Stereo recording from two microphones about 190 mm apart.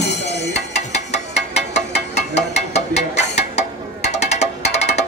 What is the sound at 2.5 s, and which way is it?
Mechanisms, 35° left (ahead or behind).